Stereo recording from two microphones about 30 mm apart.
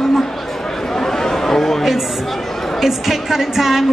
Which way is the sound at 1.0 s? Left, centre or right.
Centre.